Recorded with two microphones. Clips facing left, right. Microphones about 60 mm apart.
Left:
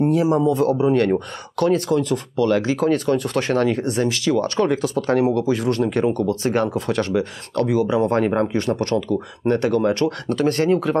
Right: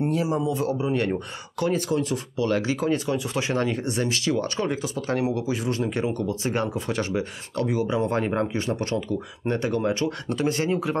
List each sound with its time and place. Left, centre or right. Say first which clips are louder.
0.2 s speech: left 7 dB; left